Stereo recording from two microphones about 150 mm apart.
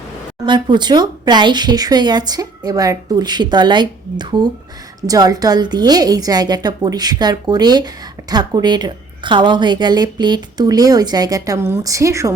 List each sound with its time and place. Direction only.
0.4 s a woman's voice: 30° right (ahead or behind)